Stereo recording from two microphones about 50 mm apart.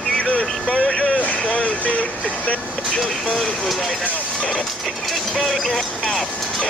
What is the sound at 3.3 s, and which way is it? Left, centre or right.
Speech, centre.